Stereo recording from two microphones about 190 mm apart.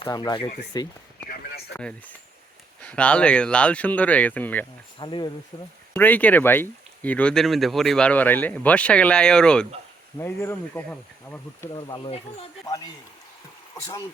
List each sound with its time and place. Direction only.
0.0 s speech: 20° left (ahead or behind)
1.7 s speech: 5° left (ahead or behind)
4.9 s speech: 25° left (ahead or behind)
5.9 s speech: 10° left (ahead or behind)
11.7 s speech: 20° left (ahead or behind)
12.6 s speech: 20° left (ahead or behind)